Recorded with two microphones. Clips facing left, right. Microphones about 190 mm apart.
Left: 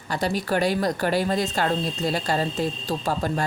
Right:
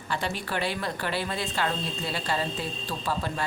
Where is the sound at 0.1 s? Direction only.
40° left (ahead or behind).